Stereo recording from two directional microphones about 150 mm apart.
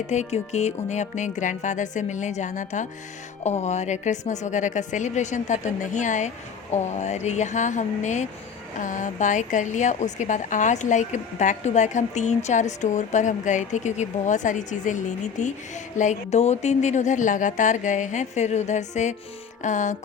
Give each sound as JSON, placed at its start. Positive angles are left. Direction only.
{"t": 0.1, "sound": "a woman's voice", "side_deg": 50}
{"t": 19.6, "sound": "music", "side_deg": 55}